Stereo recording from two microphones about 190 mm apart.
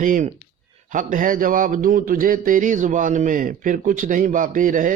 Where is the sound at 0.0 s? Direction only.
45° right (ahead or behind).